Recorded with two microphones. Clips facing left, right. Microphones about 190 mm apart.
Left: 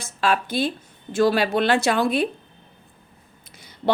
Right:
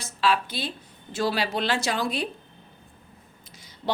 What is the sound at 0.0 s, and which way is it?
A woman's voice, 50° left (ahead or behind).